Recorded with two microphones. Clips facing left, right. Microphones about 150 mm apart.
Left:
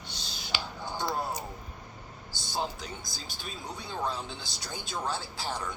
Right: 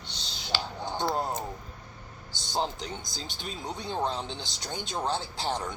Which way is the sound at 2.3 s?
20° right (ahead or behind).